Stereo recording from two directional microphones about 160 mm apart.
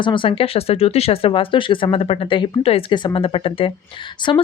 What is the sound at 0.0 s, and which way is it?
Speech, 30° left (ahead or behind).